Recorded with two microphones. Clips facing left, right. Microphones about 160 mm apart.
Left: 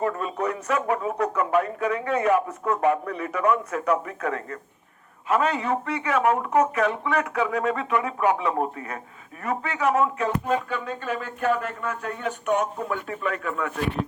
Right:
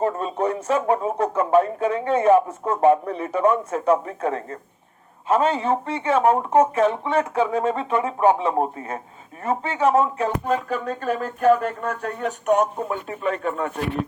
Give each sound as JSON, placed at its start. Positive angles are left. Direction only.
{"t": 0.0, "sound": "speech", "side_deg": -30}
{"t": 12.9, "sound": "speech", "side_deg": -25}